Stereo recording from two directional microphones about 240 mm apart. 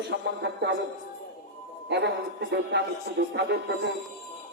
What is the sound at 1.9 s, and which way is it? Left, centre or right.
Speech, right.